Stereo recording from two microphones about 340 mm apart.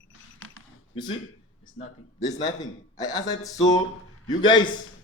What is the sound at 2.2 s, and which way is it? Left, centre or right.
A man's voice, centre.